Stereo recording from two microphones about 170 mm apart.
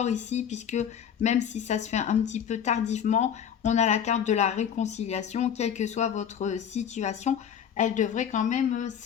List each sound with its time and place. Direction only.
0.0 s speech: 40° left (ahead or behind)